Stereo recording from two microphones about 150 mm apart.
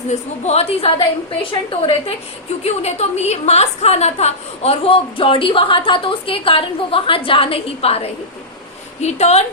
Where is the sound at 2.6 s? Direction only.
45° left (ahead or behind).